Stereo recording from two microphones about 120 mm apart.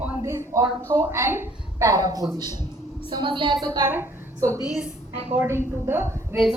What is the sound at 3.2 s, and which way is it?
Speech, 45° right (ahead or behind).